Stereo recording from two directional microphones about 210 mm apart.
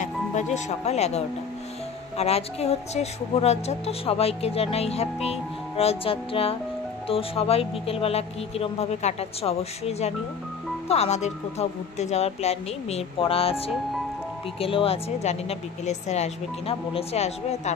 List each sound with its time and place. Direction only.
0.0 s music: 35° left (ahead or behind)
0.7 s a woman's voice: 30° left (ahead or behind)
14.6 s a woman's voice: 25° left (ahead or behind)